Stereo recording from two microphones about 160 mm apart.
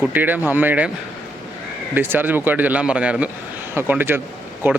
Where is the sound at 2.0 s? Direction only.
10° right (ahead or behind).